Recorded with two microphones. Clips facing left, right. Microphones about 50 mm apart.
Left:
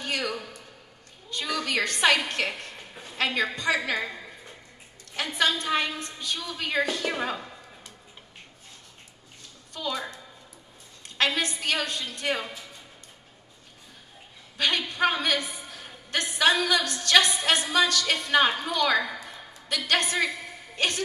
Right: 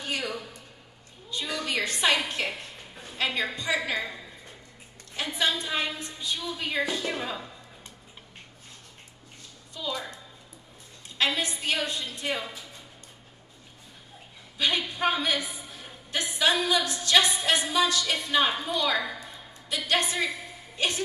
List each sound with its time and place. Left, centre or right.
0.0 s a sound: left
1.3 s a woman's voice: left
5.3 s a woman's voice: left
11.1 s a woman's voice: left
14.6 s a woman's voice: left